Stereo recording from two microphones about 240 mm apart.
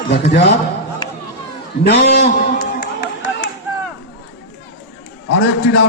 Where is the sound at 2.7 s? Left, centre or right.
Left.